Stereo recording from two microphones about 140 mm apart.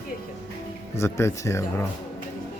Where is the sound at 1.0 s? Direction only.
20° left (ahead or behind).